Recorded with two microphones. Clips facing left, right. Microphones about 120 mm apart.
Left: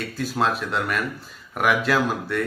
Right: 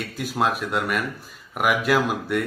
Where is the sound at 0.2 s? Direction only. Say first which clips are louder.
Even; 10° right (ahead or behind).